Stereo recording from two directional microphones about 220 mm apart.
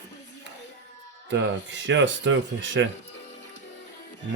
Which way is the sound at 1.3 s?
55° right (ahead or behind).